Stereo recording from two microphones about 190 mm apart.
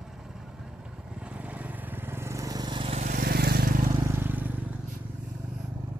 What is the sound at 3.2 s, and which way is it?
Vehicle, 55° right (ahead or behind).